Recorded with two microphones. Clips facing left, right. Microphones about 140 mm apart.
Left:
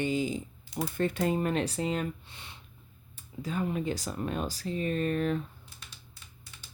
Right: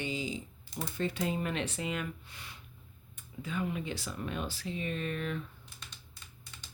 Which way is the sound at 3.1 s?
40° left (ahead or behind).